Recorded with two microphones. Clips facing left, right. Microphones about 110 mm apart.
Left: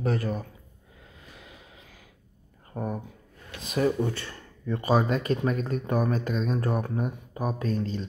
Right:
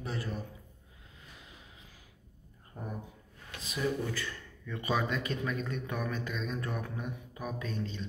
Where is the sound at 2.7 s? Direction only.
80° left.